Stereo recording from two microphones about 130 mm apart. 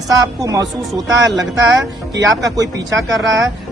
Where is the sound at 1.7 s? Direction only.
25° right (ahead or behind).